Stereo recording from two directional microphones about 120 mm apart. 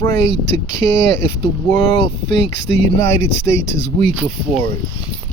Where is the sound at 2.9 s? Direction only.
30° left (ahead or behind).